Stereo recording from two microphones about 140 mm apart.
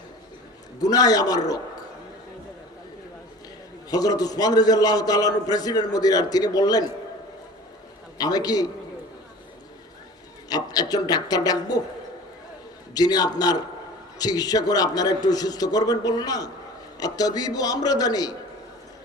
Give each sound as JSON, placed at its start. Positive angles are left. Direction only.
{"t": 0.8, "sound": "a man's voice", "side_deg": 25}
{"t": 3.8, "sound": "a man's voice", "side_deg": 25}
{"t": 8.2, "sound": "a man's voice", "side_deg": 30}
{"t": 10.5, "sound": "a man's voice", "side_deg": 30}
{"t": 12.9, "sound": "a man's voice", "side_deg": 30}